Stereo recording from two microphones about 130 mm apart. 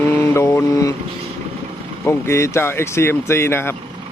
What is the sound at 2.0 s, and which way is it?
Speech, 20° left (ahead or behind).